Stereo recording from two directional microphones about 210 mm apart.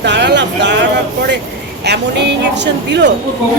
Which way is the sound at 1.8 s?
55° right (ahead or behind).